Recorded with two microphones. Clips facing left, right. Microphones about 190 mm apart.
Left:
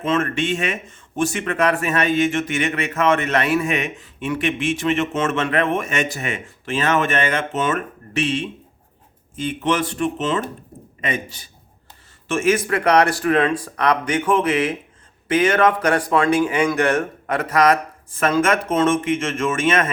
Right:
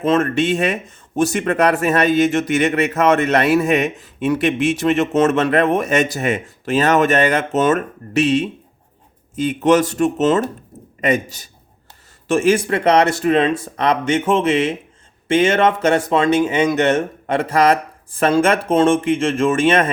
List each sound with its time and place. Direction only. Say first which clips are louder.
0.0 s speech: right 5 dB; 40° right (ahead or behind)